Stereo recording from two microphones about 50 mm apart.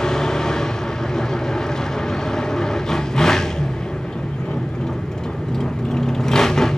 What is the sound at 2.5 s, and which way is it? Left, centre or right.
Vehicle, centre.